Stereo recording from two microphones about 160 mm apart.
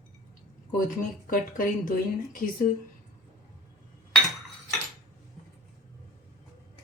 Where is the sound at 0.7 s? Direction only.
60° left (ahead or behind).